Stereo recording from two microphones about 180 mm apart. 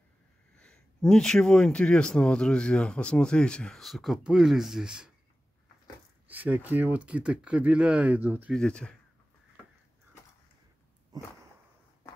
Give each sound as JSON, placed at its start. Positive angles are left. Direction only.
{"t": 0.6, "sound": "a man's voice", "side_deg": 5}
{"t": 6.2, "sound": "speech", "side_deg": -10}
{"t": 8.5, "sound": "a man's voice", "side_deg": 5}
{"t": 11.1, "sound": "a sound", "side_deg": -20}